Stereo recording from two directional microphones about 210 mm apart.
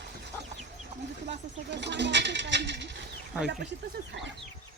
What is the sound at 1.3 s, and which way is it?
Speech, 55° right (ahead or behind).